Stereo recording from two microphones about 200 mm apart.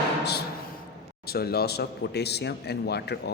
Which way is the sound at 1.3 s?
50° left (ahead or behind).